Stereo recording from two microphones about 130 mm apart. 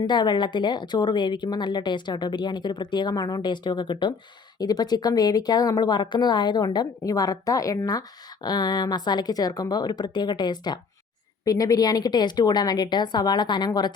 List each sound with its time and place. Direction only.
0.0 s a woman's voice: 35° left (ahead or behind)